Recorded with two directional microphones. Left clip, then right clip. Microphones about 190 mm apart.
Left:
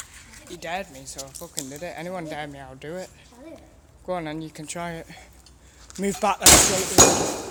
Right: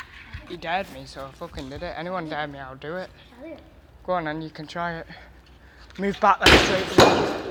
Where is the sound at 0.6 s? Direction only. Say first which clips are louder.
Right 4 dB; centre (ahead or behind).